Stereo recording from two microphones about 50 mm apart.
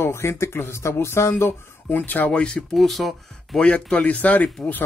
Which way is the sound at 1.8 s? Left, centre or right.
Left.